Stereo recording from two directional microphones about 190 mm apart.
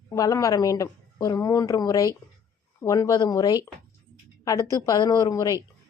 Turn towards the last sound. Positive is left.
turn(degrees=15)  # may be behind; listen again after turning